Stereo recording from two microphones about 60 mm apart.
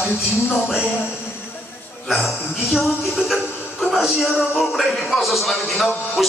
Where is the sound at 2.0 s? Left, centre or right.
Centre.